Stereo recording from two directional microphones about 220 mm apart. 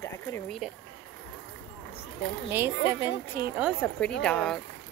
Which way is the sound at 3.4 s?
45° right (ahead or behind).